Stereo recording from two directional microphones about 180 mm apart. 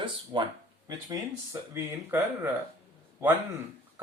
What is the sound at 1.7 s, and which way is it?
Speech, 15° right (ahead or behind).